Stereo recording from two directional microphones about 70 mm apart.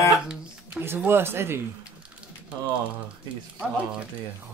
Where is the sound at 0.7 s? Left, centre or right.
Right.